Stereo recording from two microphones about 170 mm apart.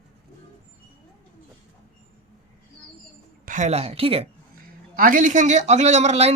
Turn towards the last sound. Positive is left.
turn(degrees=-40)  # may be behind; listen again after turning